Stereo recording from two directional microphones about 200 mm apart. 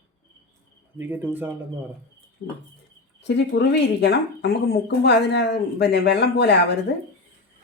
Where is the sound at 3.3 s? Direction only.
55° left (ahead or behind).